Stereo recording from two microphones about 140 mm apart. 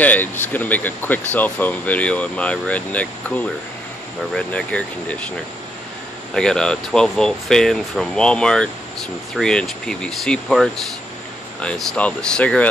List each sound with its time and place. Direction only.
0.0 s speech: 10° left (ahead or behind)
4.4 s speech: 10° left (ahead or behind)
6.3 s speech: 5° left (ahead or behind)